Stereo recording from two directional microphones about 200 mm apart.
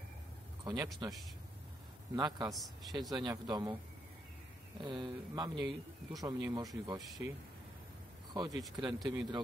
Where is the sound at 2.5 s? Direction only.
Centre (ahead or behind).